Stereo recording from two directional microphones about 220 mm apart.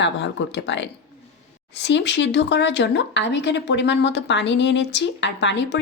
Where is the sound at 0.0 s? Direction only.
55° left (ahead or behind).